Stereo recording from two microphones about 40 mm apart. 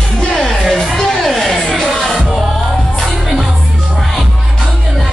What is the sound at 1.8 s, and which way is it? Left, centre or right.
Music, centre.